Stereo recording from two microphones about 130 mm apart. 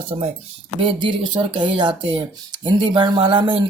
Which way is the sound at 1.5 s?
40° right (ahead or behind).